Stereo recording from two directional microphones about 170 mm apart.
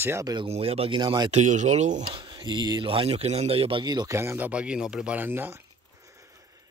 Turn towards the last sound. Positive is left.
turn(degrees=-15)  # may be behind; listen again after turning